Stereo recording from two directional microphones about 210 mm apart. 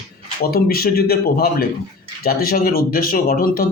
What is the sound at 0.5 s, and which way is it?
A man's voice, 45° left (ahead or behind).